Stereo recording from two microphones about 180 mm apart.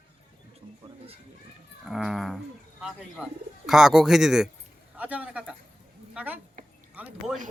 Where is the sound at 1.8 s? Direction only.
Centre (ahead or behind).